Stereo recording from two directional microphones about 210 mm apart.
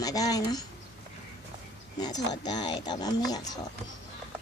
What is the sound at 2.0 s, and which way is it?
Speech, 20° left (ahead or behind).